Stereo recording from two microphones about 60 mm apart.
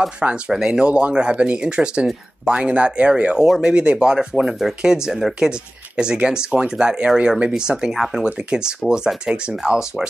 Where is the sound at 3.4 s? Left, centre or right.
Centre.